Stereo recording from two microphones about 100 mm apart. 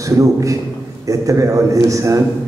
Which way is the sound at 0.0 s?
35° right (ahead or behind).